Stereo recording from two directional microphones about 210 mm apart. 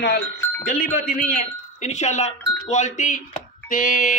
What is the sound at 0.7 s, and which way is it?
A man's voice, 45° left (ahead or behind).